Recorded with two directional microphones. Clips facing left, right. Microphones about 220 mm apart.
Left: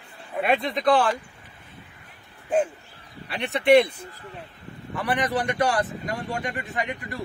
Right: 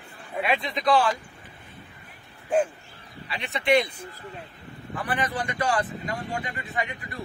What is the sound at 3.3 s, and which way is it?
Speech, 60° left (ahead or behind).